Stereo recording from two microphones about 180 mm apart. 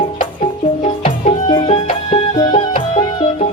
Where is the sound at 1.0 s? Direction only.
30° left (ahead or behind).